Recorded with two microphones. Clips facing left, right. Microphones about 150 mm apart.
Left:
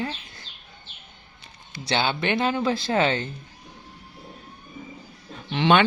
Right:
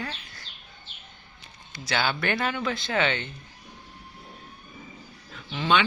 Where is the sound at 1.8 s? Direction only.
25° left (ahead or behind).